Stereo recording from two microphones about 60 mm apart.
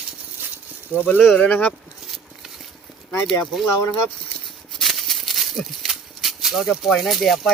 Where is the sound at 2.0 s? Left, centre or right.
Centre.